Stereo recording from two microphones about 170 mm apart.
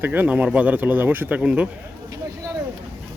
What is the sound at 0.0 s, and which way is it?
Speech, 10° right (ahead or behind).